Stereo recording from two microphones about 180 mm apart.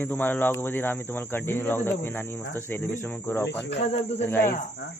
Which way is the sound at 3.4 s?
70° left (ahead or behind).